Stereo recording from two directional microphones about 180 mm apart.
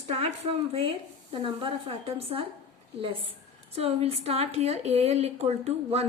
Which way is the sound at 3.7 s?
35° right (ahead or behind).